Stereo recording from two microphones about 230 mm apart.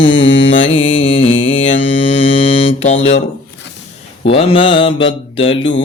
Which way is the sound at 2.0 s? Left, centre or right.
Left.